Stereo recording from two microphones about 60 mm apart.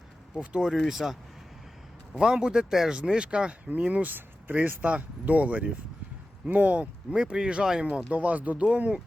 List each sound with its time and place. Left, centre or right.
0.3 s speech: centre
0.9 s speech: centre
2.1 s speech: centre
8.1 s speech: right